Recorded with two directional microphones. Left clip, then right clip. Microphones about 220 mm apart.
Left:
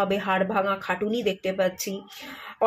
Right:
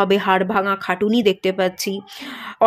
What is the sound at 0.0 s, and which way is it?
Speech, 50° right (ahead or behind).